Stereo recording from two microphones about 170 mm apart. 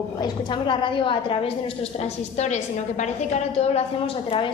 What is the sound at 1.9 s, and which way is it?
A woman's voice, 40° left (ahead or behind).